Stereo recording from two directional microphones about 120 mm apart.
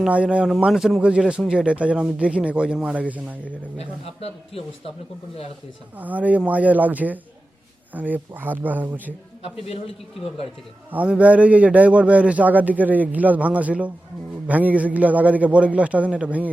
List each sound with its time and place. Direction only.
0.0 s speech: 10° right (ahead or behind)
3.8 s speech: 55° left (ahead or behind)
6.0 s speech: 15° right (ahead or behind)
9.4 s a man's voice: 55° left (ahead or behind)
10.9 s speech: 10° right (ahead or behind)